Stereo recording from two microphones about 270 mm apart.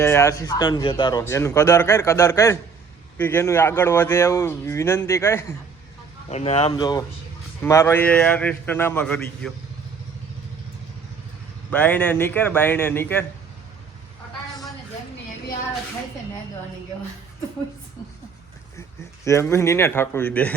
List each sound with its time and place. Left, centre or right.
0.0 s speech: centre
6.3 s a man's voice: left; by 9.5 s centre
11.7 s speech: centre
19.2 s speech: centre